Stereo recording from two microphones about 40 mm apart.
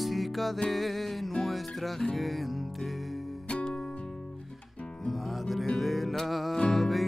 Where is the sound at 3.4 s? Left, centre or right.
Left.